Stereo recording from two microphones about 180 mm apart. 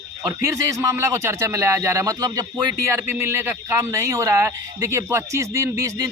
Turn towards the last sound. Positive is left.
turn(degrees=-15)  # may be behind; listen again after turning